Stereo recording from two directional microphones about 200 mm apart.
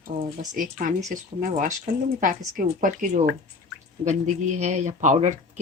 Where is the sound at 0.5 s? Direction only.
40° right (ahead or behind).